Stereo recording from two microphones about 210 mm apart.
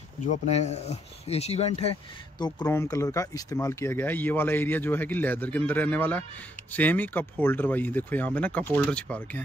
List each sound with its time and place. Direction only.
0.2 s speech: 35° left (ahead or behind); by 9.4 s 5° left (ahead or behind)